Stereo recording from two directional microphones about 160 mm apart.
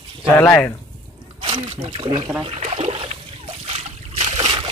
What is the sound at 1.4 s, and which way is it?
Speech, 35° right (ahead or behind).